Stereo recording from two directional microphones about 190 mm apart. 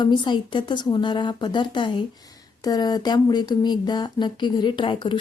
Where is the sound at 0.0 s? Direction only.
25° left (ahead or behind).